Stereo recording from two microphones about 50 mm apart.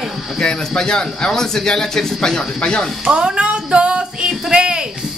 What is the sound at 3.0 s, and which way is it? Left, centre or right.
Female singing, centre.